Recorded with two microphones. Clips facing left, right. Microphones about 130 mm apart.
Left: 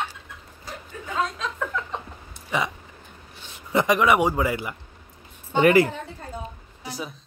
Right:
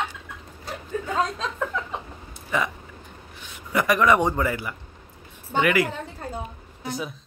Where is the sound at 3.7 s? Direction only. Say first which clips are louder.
Even; 20° left (ahead or behind).